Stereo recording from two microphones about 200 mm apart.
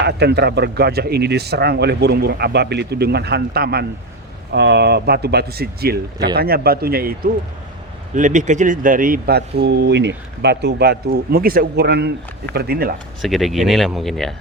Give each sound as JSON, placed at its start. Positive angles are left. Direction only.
{"t": 0.0, "sound": "speech", "side_deg": -55}
{"t": 13.2, "sound": "speech", "side_deg": 0}